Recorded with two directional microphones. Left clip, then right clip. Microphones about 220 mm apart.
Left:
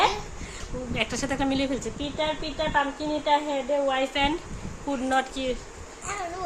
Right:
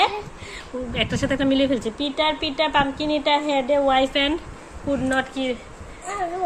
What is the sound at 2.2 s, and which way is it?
A woman's voice, 15° right (ahead or behind).